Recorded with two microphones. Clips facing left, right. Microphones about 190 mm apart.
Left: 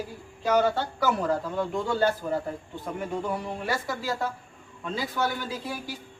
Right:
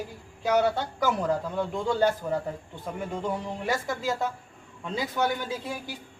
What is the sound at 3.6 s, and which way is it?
A man's voice, 20° right (ahead or behind).